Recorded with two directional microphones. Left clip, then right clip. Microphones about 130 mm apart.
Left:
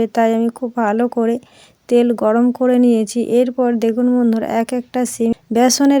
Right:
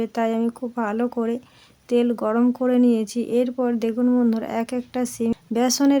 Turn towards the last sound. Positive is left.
turn(degrees=40)  # may be behind; listen again after turning